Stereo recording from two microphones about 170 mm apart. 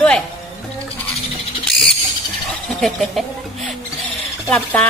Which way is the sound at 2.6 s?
Centre (ahead or behind).